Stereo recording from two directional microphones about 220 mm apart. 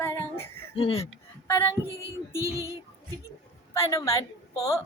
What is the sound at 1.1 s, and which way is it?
Speech, 10° left (ahead or behind).